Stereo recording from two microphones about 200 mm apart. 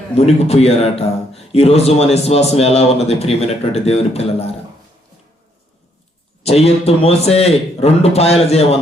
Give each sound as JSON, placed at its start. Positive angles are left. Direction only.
{"t": 0.2, "sound": "a man's voice", "side_deg": 30}
{"t": 6.4, "sound": "a man's voice", "side_deg": 30}